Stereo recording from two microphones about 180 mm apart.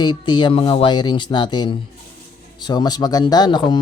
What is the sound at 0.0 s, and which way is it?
Speech, 25° left (ahead or behind).